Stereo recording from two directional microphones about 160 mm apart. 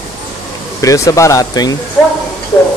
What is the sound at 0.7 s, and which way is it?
Speech, 20° left (ahead or behind).